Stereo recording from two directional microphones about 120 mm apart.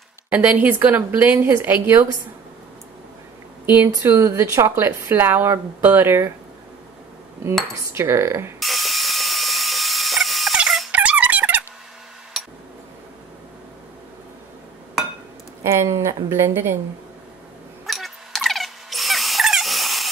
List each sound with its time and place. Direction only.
0.3 s speech: 15° right (ahead or behind)
4.0 s speech: 20° right (ahead or behind)
7.9 s speech: 20° right (ahead or behind)
8.5 s tools: centre (ahead or behind)
10.9 s music: 10° right (ahead or behind)
12.4 s a sound: centre (ahead or behind)
15.6 s speech: 25° right (ahead or behind)
17.8 s a sound: centre (ahead or behind)